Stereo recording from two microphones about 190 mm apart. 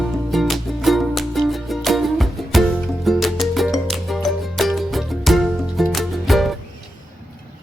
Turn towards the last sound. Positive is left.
turn(degrees=0)  # may be behind; listen again after turning